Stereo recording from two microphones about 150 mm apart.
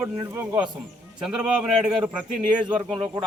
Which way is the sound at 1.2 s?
5° right (ahead or behind).